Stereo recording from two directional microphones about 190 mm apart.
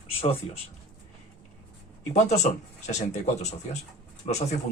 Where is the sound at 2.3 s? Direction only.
35° left (ahead or behind).